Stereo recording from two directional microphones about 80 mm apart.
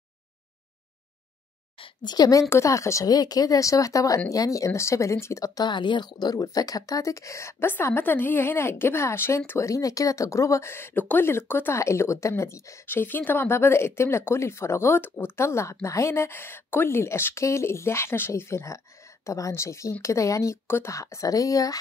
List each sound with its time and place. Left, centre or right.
1.8 s speech: left
2.5 s speech: left
3.1 s speech: left
5.7 s speech: left
7.8 s a woman's voice: left
12.8 s speech: left